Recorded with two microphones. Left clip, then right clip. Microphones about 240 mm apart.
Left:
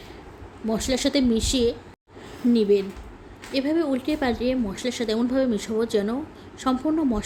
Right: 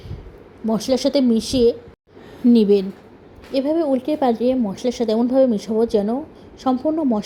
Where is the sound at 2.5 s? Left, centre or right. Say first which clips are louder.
Right 5 dB; right.